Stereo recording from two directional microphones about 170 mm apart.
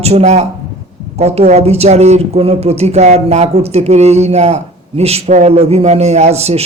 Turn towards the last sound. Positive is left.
turn(degrees=-40)  # may be behind; listen again after turning